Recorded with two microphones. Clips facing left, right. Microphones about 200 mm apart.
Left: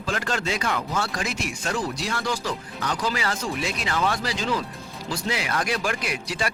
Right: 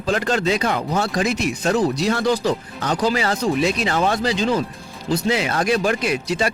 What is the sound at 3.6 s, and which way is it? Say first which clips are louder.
Speech: right 6 dB; 25° right (ahead or behind).